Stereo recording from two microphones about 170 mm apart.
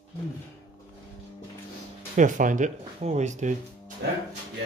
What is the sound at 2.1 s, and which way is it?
Speech, 50° right (ahead or behind).